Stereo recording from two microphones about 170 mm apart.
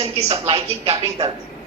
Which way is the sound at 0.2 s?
40° right (ahead or behind).